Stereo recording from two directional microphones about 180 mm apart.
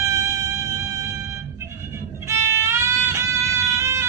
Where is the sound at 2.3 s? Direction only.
15° right (ahead or behind).